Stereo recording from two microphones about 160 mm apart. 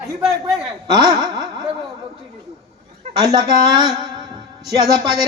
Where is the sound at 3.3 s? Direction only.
25° right (ahead or behind).